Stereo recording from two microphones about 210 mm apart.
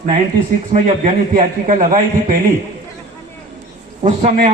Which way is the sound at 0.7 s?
35° right (ahead or behind).